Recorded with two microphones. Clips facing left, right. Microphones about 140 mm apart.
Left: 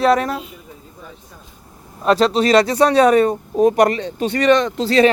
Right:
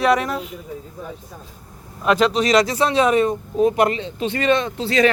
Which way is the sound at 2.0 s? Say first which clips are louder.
Left 2 dB; 35° left (ahead or behind).